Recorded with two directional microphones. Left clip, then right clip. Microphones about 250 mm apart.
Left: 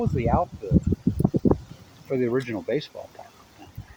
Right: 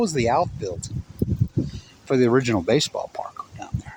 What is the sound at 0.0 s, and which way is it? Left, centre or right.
Speech, right.